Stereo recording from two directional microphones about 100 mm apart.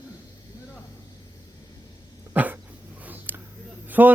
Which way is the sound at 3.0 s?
15° right (ahead or behind).